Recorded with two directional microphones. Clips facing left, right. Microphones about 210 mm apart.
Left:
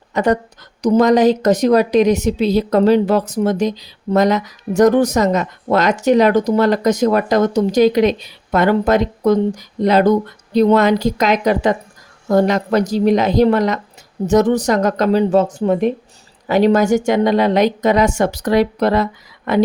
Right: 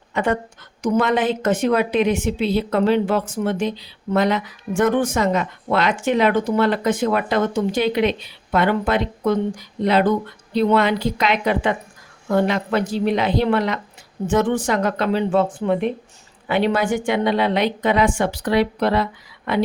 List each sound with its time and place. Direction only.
0.1 s a woman's voice: 40° left (ahead or behind)